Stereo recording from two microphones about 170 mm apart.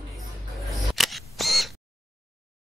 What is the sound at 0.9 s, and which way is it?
Camera, centre (ahead or behind).